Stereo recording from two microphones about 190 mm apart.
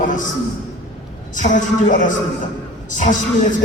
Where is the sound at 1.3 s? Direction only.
40° left (ahead or behind).